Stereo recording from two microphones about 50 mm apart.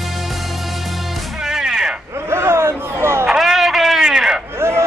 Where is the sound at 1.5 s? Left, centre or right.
Centre.